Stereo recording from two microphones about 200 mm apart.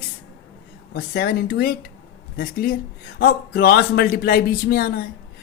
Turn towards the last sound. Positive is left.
turn(degrees=50)  # may be behind; listen again after turning